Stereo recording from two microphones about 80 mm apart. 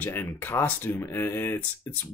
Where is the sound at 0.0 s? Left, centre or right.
Left.